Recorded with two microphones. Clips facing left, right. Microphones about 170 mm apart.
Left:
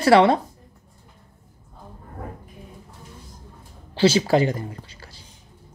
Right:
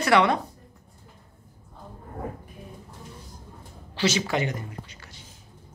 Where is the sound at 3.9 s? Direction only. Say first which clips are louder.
Left 8 dB; 30° left (ahead or behind).